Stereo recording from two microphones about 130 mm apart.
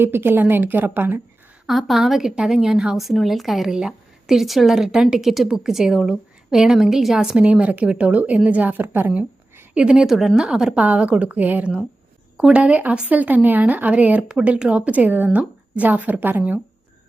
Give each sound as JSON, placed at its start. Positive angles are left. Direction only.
{"t": 0.0, "sound": "speech", "side_deg": -15}
{"t": 1.6, "sound": "a woman's voice", "side_deg": 0}